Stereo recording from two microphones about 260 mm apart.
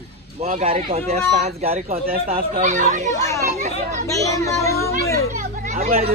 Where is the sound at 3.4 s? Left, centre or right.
Right.